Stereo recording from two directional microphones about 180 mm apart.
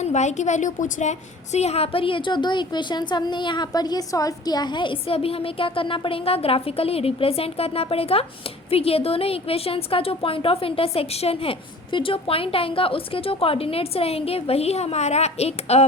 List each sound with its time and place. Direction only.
0.0 s a woman's voice: 40° left (ahead or behind)